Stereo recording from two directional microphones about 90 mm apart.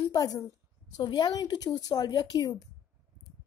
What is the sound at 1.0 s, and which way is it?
A woman's voice, 55° left (ahead or behind).